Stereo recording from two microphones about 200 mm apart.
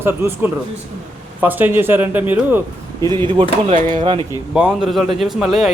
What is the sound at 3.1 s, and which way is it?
Speech, 25° right (ahead or behind).